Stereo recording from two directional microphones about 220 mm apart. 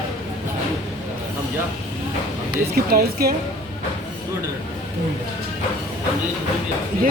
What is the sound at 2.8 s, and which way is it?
Speech, 45° right (ahead or behind).